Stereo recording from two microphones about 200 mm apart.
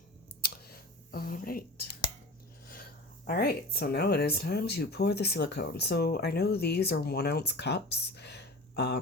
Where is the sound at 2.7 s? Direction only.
50° left (ahead or behind).